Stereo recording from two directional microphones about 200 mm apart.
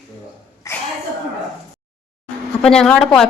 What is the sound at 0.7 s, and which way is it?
Sneeze, 15° left (ahead or behind).